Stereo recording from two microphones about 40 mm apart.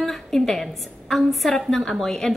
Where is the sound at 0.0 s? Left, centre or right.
Centre.